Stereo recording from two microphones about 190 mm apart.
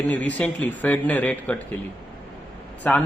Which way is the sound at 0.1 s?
10° left (ahead or behind).